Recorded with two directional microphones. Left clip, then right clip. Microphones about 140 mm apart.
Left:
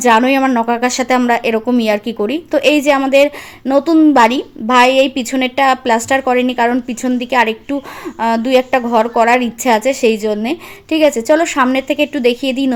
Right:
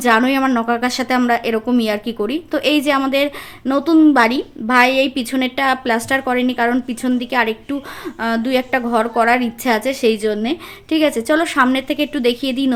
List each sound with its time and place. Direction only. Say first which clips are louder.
0.0 s speech: left 4 dB; 15° left (ahead or behind)